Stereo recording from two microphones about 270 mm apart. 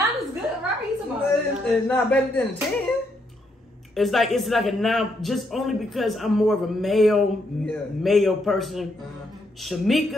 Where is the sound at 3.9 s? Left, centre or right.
Centre.